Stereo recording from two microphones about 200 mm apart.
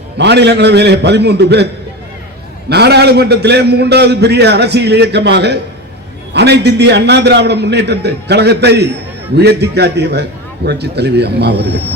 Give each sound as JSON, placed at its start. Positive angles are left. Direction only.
{"t": 0.2, "sound": "a man's voice", "side_deg": -55}
{"t": 2.6, "sound": "a man's voice", "side_deg": -55}